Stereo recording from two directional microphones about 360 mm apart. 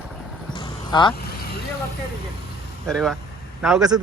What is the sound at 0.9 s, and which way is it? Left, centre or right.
Speech, centre.